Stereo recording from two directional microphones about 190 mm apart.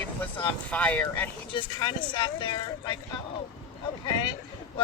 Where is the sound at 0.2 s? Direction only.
10° left (ahead or behind).